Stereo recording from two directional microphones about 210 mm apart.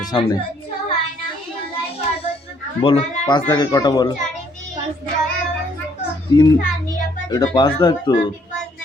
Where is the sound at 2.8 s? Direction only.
25° left (ahead or behind).